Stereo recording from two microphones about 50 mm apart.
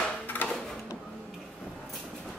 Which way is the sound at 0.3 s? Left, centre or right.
Left.